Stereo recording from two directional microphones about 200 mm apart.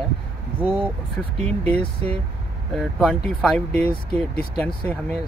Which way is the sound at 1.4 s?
30° right (ahead or behind).